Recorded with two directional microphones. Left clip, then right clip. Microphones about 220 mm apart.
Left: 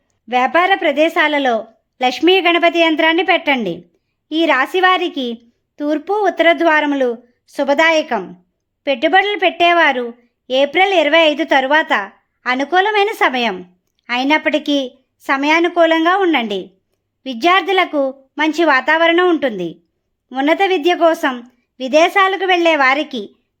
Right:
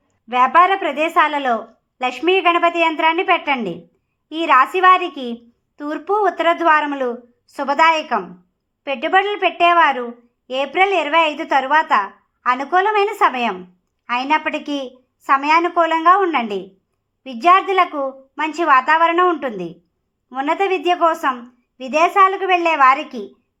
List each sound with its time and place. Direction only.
0.3 s a woman's voice: 35° left (ahead or behind)
15.3 s a woman's voice: 35° left (ahead or behind)